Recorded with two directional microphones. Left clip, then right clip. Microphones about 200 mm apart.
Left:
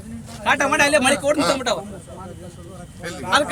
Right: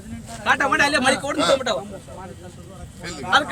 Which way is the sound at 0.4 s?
50° left (ahead or behind).